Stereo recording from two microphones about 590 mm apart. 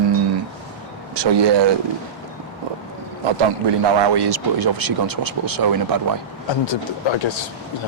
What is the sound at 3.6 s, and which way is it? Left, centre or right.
Speech, right.